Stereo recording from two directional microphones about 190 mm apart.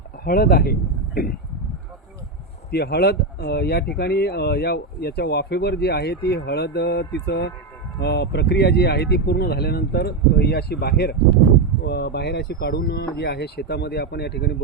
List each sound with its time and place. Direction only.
0.3 s speech: 50° left (ahead or behind)
2.7 s speech: 60° left (ahead or behind)